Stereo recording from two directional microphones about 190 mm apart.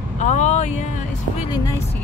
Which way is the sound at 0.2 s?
40° left (ahead or behind).